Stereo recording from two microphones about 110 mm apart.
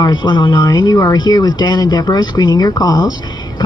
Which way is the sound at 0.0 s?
40° left (ahead or behind).